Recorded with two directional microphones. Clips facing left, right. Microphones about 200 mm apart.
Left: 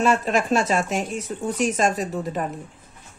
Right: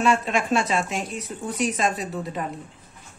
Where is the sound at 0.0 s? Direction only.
40° left (ahead or behind).